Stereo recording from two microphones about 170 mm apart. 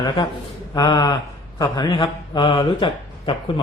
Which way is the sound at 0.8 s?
25° left (ahead or behind).